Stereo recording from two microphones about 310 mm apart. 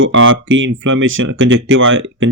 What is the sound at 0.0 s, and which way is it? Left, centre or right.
Speech, right.